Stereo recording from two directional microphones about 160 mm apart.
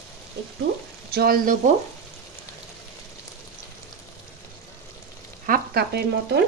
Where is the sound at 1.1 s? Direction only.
70° right (ahead or behind).